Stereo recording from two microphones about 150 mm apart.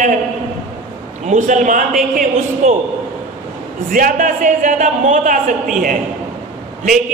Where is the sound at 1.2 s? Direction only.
55° right (ahead or behind).